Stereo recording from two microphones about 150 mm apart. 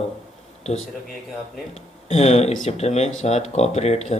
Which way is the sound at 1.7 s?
45° left (ahead or behind).